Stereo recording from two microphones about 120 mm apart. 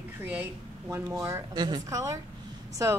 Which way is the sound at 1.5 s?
35° right (ahead or behind).